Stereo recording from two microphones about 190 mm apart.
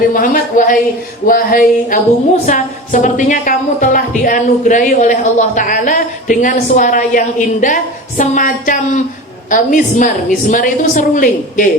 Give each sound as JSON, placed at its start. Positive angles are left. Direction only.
{"t": 0.1, "sound": "a woman's voice", "side_deg": 45}